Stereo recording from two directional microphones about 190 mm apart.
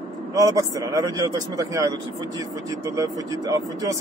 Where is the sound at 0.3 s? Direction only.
20° right (ahead or behind).